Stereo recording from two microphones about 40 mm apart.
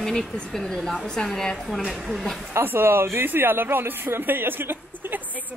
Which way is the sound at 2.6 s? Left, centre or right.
Right.